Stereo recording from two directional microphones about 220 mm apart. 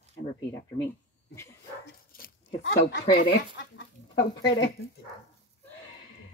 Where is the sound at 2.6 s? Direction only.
55° left (ahead or behind).